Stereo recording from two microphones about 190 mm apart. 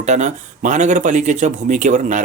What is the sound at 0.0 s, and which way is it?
Speech, 40° right (ahead or behind).